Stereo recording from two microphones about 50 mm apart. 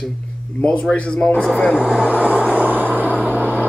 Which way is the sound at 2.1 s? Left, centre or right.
Right.